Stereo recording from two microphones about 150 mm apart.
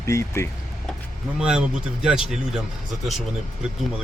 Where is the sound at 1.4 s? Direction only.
5° right (ahead or behind).